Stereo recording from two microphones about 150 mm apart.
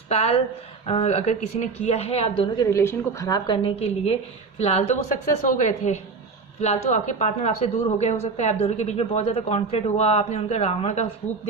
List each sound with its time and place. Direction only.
0.1 s a woman's voice: 40° left (ahead or behind)
2.6 s a woman's voice: 20° left (ahead or behind); by 11.1 s 45° left (ahead or behind)